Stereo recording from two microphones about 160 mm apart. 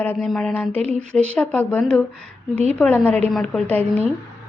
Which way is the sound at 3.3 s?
Centre (ahead or behind).